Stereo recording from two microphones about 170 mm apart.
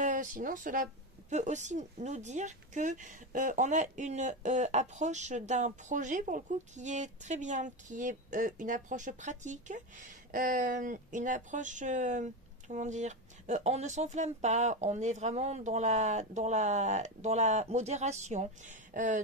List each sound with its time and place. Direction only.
0.0 s speech: 50° right (ahead or behind)